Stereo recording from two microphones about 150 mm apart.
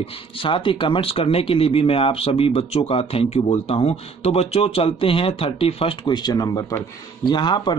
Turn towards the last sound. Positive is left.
turn(degrees=30)  # may be behind; listen again after turning